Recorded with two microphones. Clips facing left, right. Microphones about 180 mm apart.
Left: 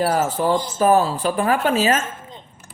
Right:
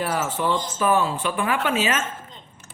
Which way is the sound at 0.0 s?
35° left (ahead or behind).